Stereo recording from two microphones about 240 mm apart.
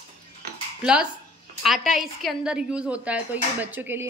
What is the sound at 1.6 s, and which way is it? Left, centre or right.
A woman's voice, centre.